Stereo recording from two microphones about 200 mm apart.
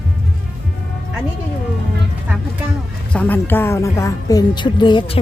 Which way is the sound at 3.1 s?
10° left (ahead or behind).